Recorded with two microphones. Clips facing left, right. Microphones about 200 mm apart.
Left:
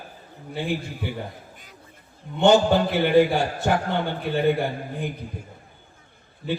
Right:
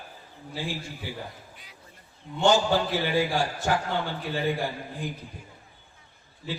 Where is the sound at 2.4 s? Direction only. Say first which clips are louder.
Left 5 dB; 60° left (ahead or behind).